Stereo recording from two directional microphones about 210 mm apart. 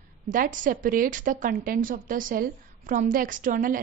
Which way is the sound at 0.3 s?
40° right (ahead or behind).